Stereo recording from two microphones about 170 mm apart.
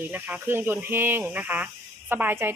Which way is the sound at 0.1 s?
10° right (ahead or behind).